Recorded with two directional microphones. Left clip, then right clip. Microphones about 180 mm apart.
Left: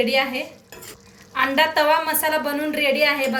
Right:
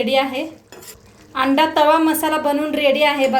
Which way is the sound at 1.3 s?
50° right (ahead or behind).